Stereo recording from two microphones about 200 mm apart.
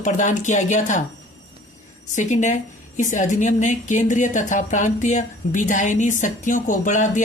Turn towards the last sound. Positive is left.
turn(degrees=40)  # may be behind; listen again after turning